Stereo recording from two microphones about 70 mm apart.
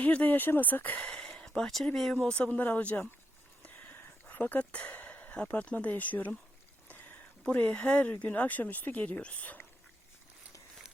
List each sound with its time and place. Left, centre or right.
0.0 s speech: left
0.9 s speech: centre
4.3 s speech: left
6.8 s a sound: left
7.4 s speech: left